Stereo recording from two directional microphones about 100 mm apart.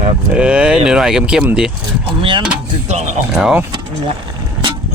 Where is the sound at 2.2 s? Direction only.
55° right (ahead or behind).